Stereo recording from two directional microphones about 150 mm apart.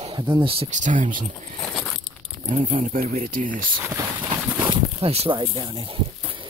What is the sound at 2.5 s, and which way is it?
Speech, 60° right (ahead or behind).